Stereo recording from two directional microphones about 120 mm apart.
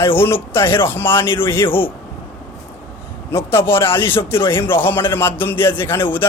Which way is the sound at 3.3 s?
20° left (ahead or behind).